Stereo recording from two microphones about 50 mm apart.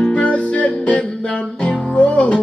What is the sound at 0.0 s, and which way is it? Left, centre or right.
Music, left.